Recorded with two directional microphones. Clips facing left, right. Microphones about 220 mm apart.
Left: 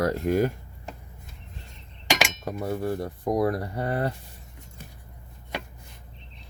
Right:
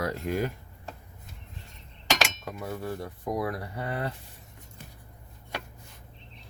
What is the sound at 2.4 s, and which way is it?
Speech, 35° left (ahead or behind).